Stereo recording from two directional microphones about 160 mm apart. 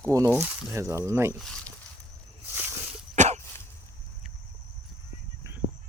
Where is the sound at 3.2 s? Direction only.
45° right (ahead or behind).